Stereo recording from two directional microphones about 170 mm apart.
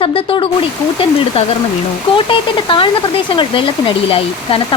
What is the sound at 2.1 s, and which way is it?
Speech, 30° left (ahead or behind).